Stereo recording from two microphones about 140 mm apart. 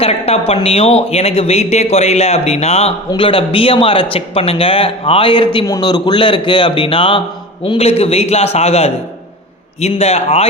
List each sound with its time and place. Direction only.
0.0 s speech: 45° left (ahead or behind)